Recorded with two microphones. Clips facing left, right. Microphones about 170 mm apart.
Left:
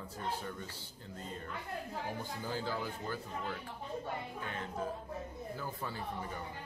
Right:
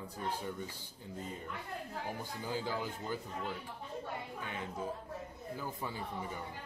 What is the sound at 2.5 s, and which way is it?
Speech, 15° right (ahead or behind).